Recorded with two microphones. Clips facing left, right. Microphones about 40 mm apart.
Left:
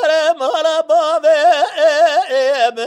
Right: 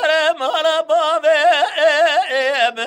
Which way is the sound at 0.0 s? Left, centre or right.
Right.